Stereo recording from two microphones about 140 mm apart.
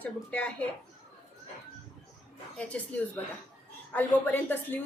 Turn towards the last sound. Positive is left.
turn(degrees=15)  # may be behind; listen again after turning